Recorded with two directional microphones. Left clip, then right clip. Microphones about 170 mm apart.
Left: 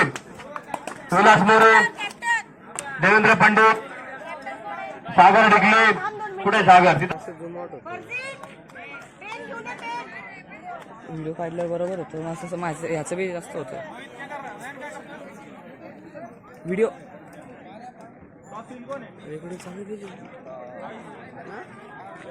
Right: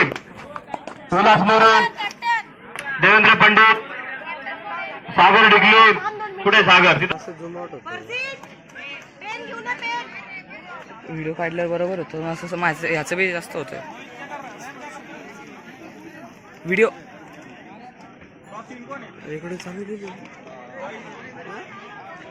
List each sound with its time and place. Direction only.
0.7 s speech: 30° left (ahead or behind)
2.0 s a sound: 40° left (ahead or behind)
6.4 s a man's voice: 50° left (ahead or behind)
9.6 s a sound: 55° left (ahead or behind)
11.3 s a man's voice: 15° right (ahead or behind); by 13.7 s 5° left (ahead or behind)
16.6 s speech: centre (ahead or behind)